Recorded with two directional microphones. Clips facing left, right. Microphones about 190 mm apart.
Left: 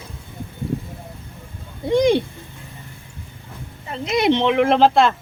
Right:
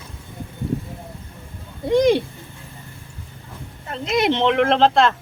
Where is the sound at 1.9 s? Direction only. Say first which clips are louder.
Even; centre (ahead or behind).